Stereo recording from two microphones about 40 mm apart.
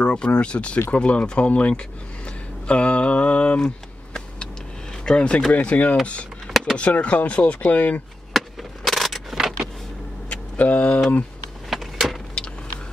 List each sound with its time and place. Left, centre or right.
0.0 s speech: left
1.7 s a sound: left
5.0 s speech: left
5.5 s speech: left
8.3 s vehicle: centre
10.3 s a sound: left
11.7 s power windows: centre